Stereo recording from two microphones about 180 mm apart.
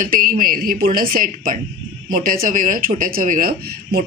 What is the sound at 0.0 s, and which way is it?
A woman's voice, 50° right (ahead or behind).